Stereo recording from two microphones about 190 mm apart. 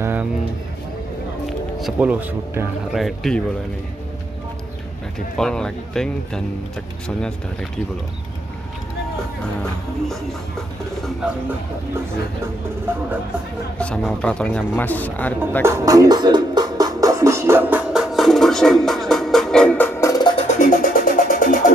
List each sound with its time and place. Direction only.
0.0 s bird: 10° right (ahead or behind)
1.8 s speech: 5° right (ahead or behind)
2.9 s speech: centre (ahead or behind)
5.4 s speech: 5° left (ahead or behind)
9.4 s speech: 5° left (ahead or behind)
13.7 s speech: 5° left (ahead or behind)
15.6 s music: 20° right (ahead or behind); by 20.4 s 20° left (ahead or behind)
20.4 s music: 40° left (ahead or behind)